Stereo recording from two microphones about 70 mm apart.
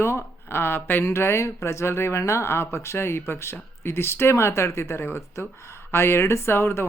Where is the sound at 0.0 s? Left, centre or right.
Left.